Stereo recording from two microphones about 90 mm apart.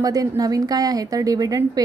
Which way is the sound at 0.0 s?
40° right (ahead or behind).